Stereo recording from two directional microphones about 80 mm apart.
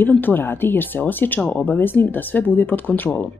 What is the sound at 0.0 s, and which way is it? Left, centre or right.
Speech, left.